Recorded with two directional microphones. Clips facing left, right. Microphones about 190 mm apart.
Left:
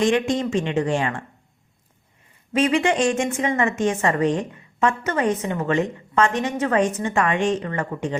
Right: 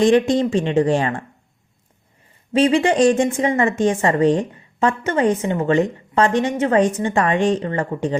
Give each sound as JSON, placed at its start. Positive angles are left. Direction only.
{"t": 0.0, "sound": "a woman's voice", "side_deg": -35}
{"t": 2.5, "sound": "a woman's voice", "side_deg": -30}